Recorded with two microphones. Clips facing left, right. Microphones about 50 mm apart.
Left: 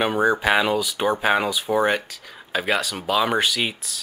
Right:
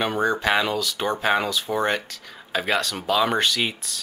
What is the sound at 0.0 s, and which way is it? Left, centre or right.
Speech, centre.